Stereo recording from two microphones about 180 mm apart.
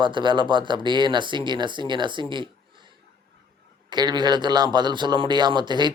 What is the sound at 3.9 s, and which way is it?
Speech, 25° right (ahead or behind).